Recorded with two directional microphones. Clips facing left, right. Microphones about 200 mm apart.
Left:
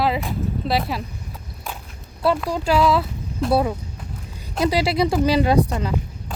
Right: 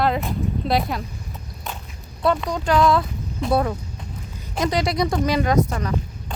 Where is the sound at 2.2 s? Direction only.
5° left (ahead or behind).